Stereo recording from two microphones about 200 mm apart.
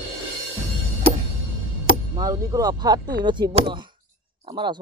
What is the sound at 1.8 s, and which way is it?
Speech, 20° right (ahead or behind).